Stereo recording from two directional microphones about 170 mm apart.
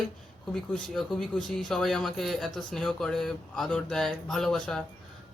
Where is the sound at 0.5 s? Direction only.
Centre (ahead or behind).